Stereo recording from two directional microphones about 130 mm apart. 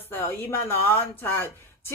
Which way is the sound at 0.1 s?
20° left (ahead or behind).